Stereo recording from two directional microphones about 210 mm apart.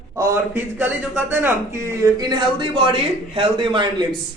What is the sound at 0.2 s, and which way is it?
A man's voice, 10° right (ahead or behind).